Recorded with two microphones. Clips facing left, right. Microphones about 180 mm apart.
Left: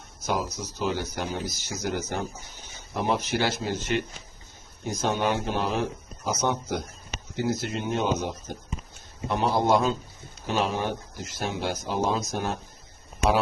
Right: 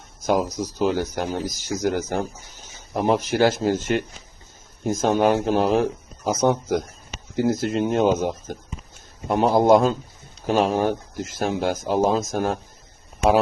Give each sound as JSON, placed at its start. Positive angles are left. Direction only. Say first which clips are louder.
{"t": 0.3, "sound": "speech", "louder": "right 7 dB", "side_deg": -45}